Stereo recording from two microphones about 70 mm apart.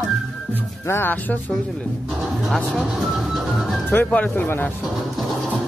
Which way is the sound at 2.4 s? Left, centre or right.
Centre.